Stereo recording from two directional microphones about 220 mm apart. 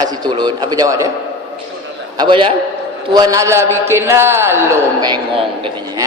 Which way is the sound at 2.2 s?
20° right (ahead or behind).